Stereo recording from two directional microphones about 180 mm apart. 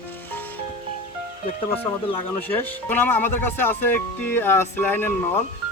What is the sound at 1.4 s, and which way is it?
Speech, 35° left (ahead or behind).